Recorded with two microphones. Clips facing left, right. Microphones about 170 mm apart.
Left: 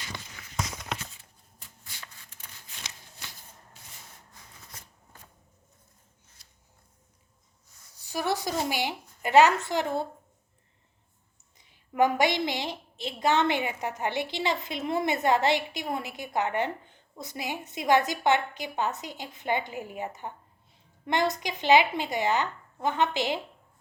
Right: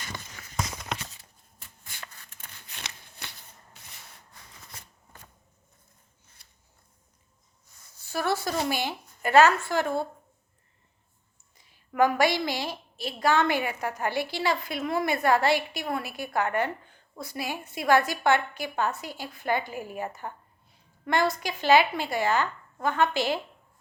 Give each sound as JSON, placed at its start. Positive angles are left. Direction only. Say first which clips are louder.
{"t": 0.0, "sound": "run", "louder": "right 1 dB", "side_deg": -45}
{"t": 1.5, "sound": "shuffling cards", "louder": "right 3 dB", "side_deg": -50}
{"t": 3.8, "sound": "wood", "louder": "even", "side_deg": -65}
{"t": 6.4, "sound": "a sound", "louder": "even", "side_deg": -60}
{"t": 8.0, "sound": "a woman's voice", "louder": "right 1 dB", "side_deg": 15}
{"t": 11.5, "sound": "a woman's voice", "louder": "right 1 dB", "side_deg": 20}